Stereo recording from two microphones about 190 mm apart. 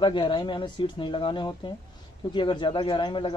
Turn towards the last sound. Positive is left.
turn(degrees=25)  # may be behind; listen again after turning